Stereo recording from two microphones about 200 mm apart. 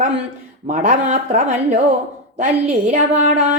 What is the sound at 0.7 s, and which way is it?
Music, 35° right (ahead or behind).